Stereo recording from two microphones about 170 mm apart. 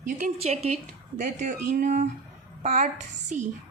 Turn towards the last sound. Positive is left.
turn(degrees=-45)  # may be behind; listen again after turning